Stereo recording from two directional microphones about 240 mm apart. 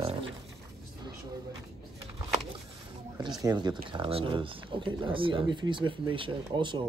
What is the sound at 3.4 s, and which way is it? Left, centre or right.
Speech, centre.